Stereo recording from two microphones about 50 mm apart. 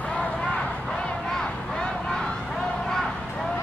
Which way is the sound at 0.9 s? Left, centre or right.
Centre.